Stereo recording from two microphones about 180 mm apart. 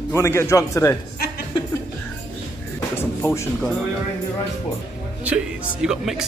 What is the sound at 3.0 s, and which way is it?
Speech, 10° left (ahead or behind).